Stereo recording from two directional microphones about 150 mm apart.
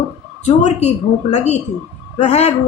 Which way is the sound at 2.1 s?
50° left (ahead or behind).